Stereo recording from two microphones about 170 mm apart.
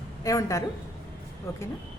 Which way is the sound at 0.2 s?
20° left (ahead or behind).